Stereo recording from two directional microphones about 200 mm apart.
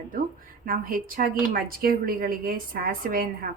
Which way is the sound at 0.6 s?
45° right (ahead or behind).